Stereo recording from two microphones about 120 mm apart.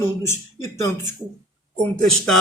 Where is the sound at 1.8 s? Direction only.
10° left (ahead or behind).